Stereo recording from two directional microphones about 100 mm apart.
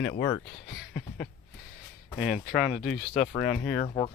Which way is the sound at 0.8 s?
5° left (ahead or behind).